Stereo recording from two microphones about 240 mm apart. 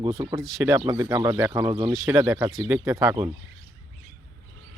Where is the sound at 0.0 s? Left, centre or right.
Centre.